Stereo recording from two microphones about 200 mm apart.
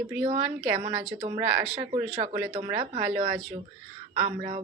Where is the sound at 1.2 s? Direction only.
25° right (ahead or behind).